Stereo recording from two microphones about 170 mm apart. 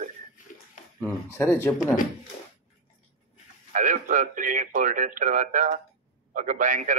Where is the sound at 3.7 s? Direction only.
50° right (ahead or behind).